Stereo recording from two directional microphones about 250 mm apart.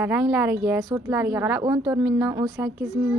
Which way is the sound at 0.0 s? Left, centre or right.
Centre.